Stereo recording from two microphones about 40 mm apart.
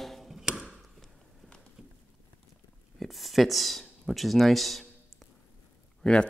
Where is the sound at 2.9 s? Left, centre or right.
Centre.